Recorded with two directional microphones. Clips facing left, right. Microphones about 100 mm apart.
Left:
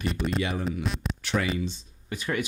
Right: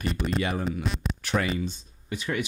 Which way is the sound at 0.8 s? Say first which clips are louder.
Right 1 dB; centre (ahead or behind).